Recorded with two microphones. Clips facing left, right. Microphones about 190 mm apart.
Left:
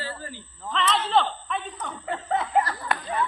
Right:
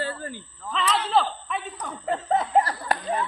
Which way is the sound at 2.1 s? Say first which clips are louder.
Right 3 dB; 40° right (ahead or behind).